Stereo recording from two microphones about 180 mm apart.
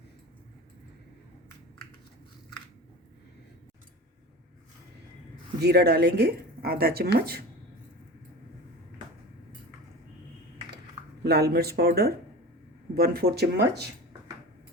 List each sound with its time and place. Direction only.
5.5 s speech: 65° right (ahead or behind)
11.2 s speech: 65° right (ahead or behind)